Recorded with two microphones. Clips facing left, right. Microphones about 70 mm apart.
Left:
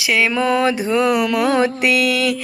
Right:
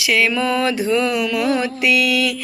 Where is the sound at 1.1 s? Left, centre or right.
Left.